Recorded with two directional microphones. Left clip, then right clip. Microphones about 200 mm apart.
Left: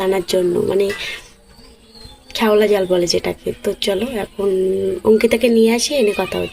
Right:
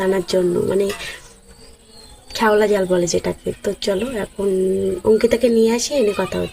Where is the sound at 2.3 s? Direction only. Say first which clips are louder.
Left 1 dB; 5° right (ahead or behind).